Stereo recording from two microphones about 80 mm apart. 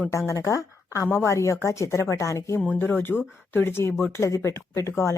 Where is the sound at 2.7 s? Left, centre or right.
Left.